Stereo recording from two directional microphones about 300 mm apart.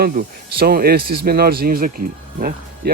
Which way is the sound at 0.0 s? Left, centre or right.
Right.